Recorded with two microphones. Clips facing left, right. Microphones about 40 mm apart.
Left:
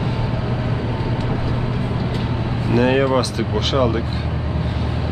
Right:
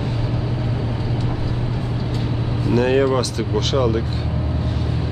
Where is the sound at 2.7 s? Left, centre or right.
Centre.